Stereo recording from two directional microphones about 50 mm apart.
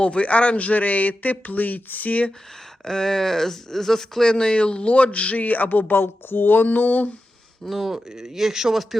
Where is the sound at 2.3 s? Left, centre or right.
Centre; by 7.1 s left.